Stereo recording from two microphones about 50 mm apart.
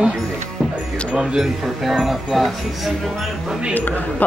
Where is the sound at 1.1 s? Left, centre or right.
Centre.